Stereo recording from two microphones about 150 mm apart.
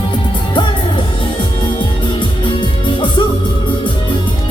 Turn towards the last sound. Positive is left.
turn(degrees=35)  # may be behind; listen again after turning